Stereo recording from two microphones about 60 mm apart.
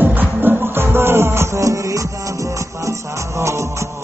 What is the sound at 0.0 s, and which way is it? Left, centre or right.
Music, right.